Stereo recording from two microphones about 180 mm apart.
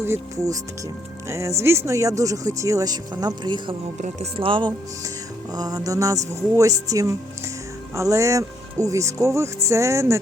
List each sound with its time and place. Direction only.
0.0 s speech: 15° right (ahead or behind)
3.9 s speech: 35° right (ahead or behind); by 10.2 s 15° right (ahead or behind)